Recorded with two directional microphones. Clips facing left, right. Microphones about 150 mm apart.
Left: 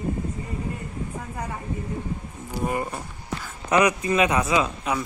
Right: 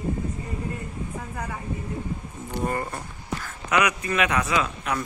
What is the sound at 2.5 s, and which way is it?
Speech, 10° left (ahead or behind).